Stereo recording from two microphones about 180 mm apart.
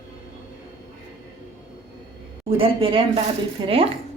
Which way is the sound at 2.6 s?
30° right (ahead or behind).